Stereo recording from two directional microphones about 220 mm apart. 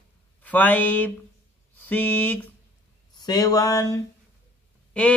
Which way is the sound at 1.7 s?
10° left (ahead or behind).